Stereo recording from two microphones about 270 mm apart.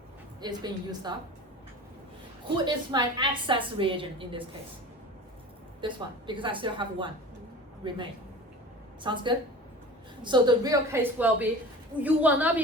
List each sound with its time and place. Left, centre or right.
0.4 s a woman's voice: centre
2.6 s a woman's voice: centre
5.8 s a woman's voice: centre
9.0 s a woman's voice: centre